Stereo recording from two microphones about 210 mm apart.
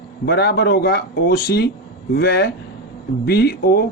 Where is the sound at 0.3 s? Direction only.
50° left (ahead or behind).